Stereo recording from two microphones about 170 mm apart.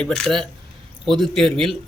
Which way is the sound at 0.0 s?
5° left (ahead or behind).